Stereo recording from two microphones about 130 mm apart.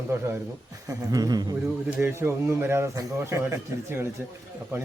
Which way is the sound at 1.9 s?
15° right (ahead or behind).